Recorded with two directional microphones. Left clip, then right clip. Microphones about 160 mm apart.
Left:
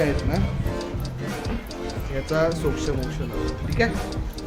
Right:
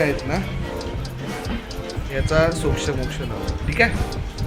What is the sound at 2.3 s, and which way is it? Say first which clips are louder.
Speech: right 3 dB; 5° right (ahead or behind).